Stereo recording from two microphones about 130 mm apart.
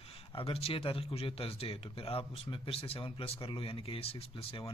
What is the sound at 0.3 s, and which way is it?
Speech, 45° left (ahead or behind).